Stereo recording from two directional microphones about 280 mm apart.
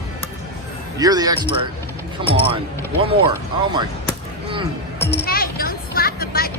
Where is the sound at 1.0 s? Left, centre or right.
Centre.